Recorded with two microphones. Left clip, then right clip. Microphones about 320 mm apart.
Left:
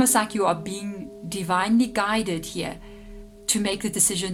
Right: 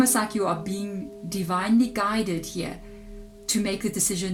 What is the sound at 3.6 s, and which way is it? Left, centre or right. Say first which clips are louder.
Speech: left 1 dB; left.